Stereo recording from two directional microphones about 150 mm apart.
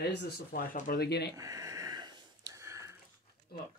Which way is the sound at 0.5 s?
70° left (ahead or behind).